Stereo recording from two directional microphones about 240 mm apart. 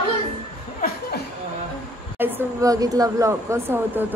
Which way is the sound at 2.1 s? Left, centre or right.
Centre.